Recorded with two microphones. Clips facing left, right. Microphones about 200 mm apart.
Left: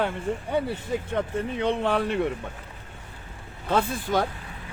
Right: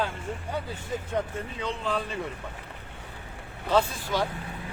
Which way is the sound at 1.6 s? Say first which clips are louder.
Left 6 dB; 65° left (ahead or behind).